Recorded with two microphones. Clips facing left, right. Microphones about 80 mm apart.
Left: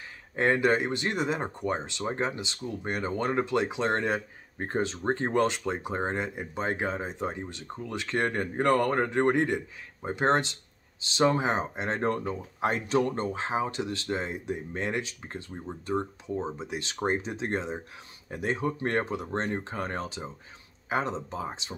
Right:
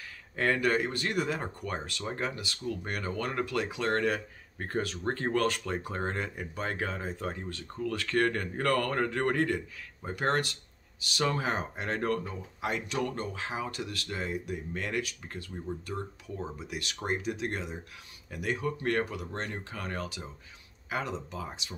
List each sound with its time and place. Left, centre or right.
0.4 s speech: left